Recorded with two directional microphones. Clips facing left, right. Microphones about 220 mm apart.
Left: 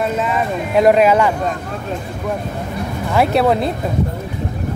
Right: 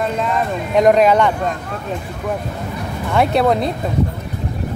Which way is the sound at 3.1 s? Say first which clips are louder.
Even; centre (ahead or behind).